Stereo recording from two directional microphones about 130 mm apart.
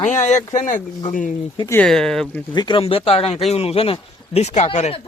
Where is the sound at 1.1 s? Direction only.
90° left.